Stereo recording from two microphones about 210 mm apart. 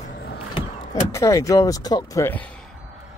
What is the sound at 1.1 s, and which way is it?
Speech, 15° left (ahead or behind).